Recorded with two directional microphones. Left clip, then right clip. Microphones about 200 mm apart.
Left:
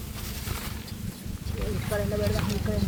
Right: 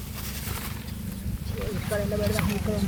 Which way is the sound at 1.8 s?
50° right (ahead or behind).